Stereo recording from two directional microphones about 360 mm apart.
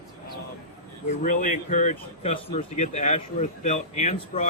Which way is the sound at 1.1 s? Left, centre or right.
Left.